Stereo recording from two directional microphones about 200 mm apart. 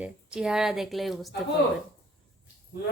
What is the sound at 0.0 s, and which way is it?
A woman's voice, 5° right (ahead or behind).